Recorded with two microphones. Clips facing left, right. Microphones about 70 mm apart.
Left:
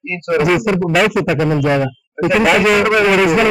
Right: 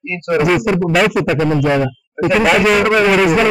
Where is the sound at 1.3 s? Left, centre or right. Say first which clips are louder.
Right 1 dB; centre.